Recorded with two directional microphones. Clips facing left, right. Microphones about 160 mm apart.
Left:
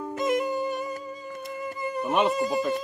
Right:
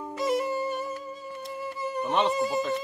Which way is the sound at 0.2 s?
Centre (ahead or behind).